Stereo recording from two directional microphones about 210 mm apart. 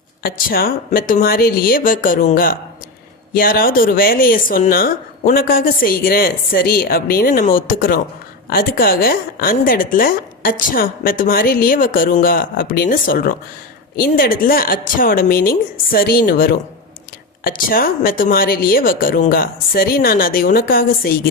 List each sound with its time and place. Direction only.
0.2 s speech: 45° left (ahead or behind)